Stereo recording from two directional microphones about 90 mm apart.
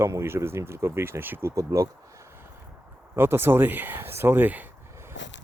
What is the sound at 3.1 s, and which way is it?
Speech, 25° right (ahead or behind).